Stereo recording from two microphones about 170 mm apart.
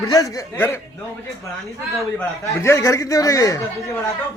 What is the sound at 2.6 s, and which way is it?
A man's voice, 15° left (ahead or behind).